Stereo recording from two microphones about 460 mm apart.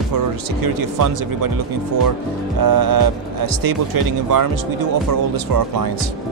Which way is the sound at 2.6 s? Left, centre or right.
Right.